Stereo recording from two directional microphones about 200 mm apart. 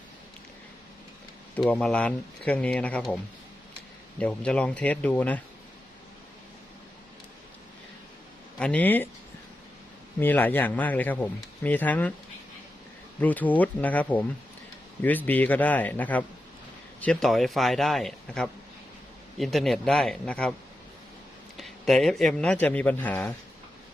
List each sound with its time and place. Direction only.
1.5 s a man's voice: 5° left (ahead or behind)
4.2 s speech: 5° left (ahead or behind)
8.5 s speech: 5° left (ahead or behind)
10.2 s speech: 10° left (ahead or behind)
13.1 s a man's voice: 10° left (ahead or behind)
21.6 s a man's voice: centre (ahead or behind)